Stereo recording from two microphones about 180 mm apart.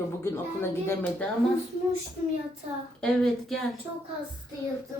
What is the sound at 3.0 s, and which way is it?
Speech, 5° left (ahead or behind).